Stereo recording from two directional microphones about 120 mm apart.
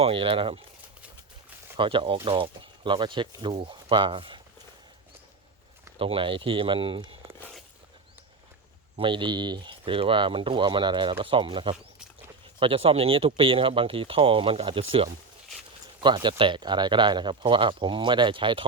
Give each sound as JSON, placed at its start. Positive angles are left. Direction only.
{"t": 0.0, "sound": "speech", "side_deg": -50}
{"t": 1.7, "sound": "speech", "side_deg": -45}
{"t": 6.0, "sound": "speech", "side_deg": -50}
{"t": 9.0, "sound": "speech", "side_deg": -40}
{"t": 16.0, "sound": "speech", "side_deg": -40}